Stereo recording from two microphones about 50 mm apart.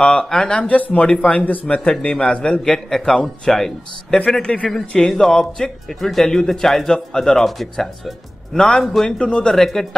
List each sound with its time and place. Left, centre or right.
0.0 s speech: centre
2.6 s speech: centre
4.4 s speech: left
4.6 s speech: centre
9.2 s speech: left
9.5 s speech: centre